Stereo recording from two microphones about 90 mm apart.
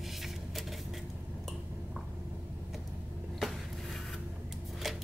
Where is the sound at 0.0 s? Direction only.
Centre (ahead or behind).